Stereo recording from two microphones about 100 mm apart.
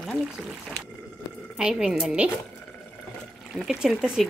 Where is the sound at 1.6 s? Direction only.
5° right (ahead or behind).